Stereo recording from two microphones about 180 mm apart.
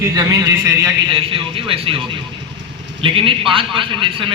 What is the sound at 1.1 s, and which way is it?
A man's voice, 30° right (ahead or behind).